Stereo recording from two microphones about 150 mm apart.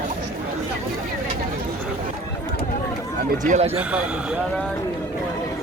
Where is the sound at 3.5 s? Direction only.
50° right (ahead or behind).